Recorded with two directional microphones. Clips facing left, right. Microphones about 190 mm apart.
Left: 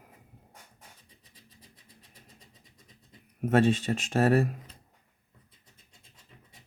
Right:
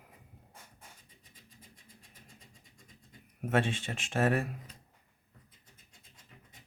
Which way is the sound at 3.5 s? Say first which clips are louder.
Left 7 dB; 40° left (ahead or behind).